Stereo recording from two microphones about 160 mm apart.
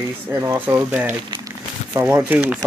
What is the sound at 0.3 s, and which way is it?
Speech, 20° right (ahead or behind).